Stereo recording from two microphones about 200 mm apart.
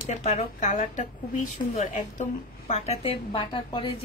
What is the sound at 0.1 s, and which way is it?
A woman's voice, 35° left (ahead or behind).